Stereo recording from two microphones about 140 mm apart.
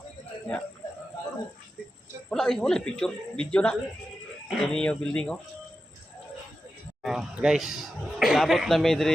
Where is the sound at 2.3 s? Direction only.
5° left (ahead or behind).